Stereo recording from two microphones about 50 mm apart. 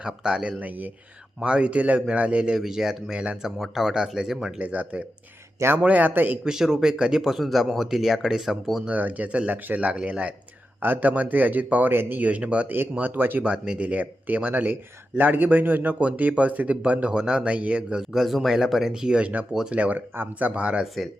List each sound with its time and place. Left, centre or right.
0.0 s speech: centre
2.6 s speech: centre
4.6 s a man's voice: right
6.4 s speech: centre
9.0 s a man's voice: right
10.8 s a man's voice: right
12.2 s a man's voice: right
13.4 s a man's voice: right
17.2 s speech: centre
17.4 s speech: right
18.1 s speech: centre
19.7 s a man's voice: right